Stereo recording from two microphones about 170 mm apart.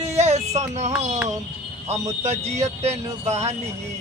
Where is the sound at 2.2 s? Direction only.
40° right (ahead or behind).